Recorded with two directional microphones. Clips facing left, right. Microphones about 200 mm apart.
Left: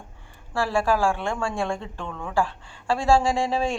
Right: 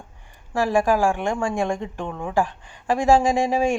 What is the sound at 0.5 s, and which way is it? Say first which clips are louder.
Speech: right 3 dB; 15° right (ahead or behind).